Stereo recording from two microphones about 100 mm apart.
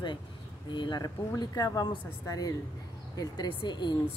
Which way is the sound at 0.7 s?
50° left (ahead or behind).